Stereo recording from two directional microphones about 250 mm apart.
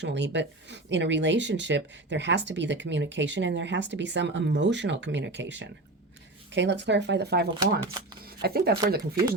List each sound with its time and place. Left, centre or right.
0.0 s speech: right
7.6 s speech: centre
8.2 s speech: right